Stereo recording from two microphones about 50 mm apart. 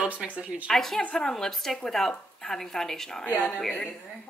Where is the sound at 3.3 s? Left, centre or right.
Left.